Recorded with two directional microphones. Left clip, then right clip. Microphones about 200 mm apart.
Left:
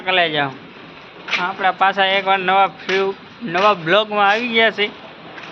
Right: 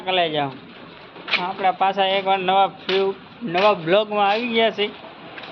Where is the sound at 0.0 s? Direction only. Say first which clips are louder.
Left 4 dB; centre (ahead or behind).